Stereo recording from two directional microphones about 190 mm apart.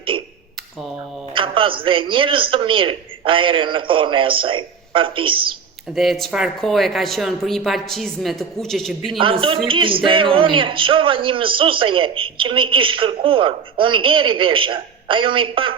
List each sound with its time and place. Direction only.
1.3 s speech: 25° right (ahead or behind)
5.9 s speech: centre (ahead or behind)
9.1 s speech: 25° right (ahead or behind)